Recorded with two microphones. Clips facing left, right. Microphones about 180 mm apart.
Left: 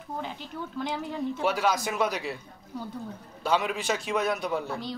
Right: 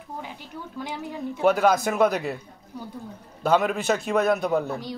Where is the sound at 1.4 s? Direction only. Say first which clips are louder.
Right 8 dB; 50° right (ahead or behind).